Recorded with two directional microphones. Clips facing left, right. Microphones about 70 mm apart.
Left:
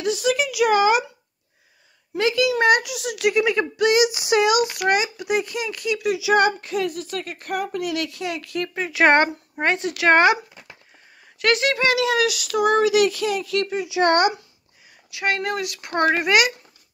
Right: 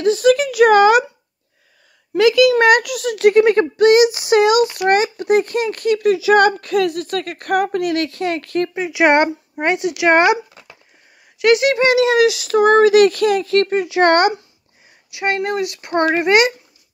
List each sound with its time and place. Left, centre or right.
0.0 s speech: right
2.1 s a child's voice: right
2.6 s a child's voice: right
8.6 s speech: centre
11.3 s speech: centre; by 14.3 s right
15.0 s speech: right